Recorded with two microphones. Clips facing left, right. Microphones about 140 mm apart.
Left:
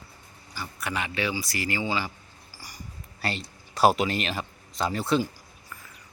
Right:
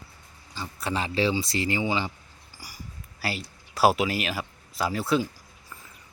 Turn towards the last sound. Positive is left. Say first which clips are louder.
# even
turn(degrees=0)  # may be behind; listen again after turning